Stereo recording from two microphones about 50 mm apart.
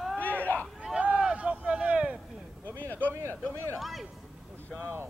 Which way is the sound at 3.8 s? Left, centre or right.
Centre.